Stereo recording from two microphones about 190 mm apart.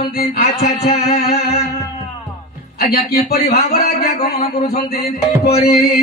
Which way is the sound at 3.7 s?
55° left (ahead or behind).